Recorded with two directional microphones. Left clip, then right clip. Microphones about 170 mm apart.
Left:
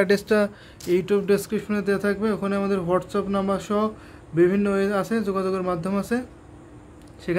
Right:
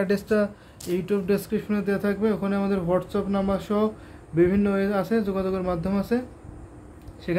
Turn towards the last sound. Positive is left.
turn(degrees=15)  # may be behind; listen again after turning